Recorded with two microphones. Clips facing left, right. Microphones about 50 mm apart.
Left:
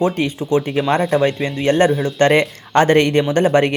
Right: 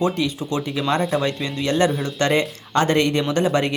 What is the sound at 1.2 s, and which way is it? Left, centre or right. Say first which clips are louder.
Speech: left 6 dB; centre.